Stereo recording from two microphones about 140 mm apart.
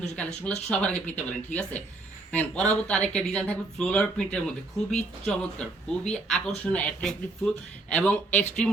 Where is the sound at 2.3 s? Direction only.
10° left (ahead or behind).